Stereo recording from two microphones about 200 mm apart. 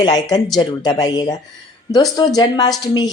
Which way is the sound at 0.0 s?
20° left (ahead or behind).